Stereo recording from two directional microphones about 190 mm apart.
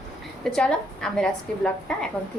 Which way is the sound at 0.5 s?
5° left (ahead or behind).